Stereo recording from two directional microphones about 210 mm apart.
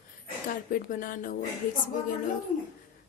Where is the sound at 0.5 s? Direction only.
40° left (ahead or behind).